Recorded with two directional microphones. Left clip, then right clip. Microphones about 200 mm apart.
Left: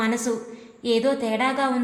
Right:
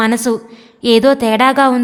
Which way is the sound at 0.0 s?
45° right (ahead or behind).